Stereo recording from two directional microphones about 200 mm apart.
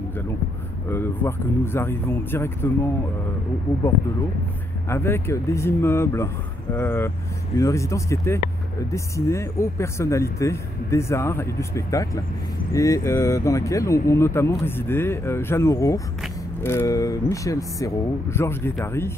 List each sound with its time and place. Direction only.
0.8 s speech: 10° left (ahead or behind)
4.8 s speech: 10° left (ahead or behind)